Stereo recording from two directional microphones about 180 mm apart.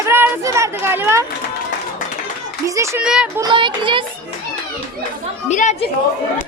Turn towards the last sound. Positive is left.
turn(degrees=40)  # may be behind; listen again after turning